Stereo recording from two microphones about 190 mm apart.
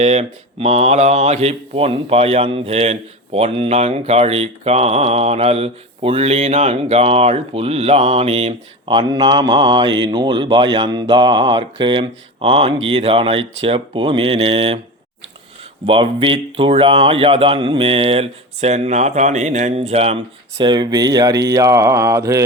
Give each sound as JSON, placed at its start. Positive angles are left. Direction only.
{"t": 0.0, "sound": "speech", "side_deg": -35}
{"t": 15.9, "sound": "speech", "side_deg": -25}